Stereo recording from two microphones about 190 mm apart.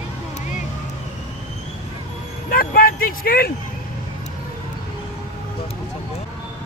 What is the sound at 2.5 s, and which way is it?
Vehicle, 50° left (ahead or behind).